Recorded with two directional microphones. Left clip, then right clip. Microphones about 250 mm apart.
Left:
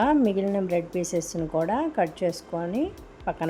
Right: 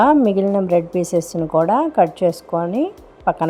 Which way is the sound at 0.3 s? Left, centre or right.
Centre.